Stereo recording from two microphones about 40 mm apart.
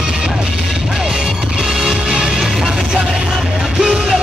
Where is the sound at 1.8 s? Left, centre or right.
Centre.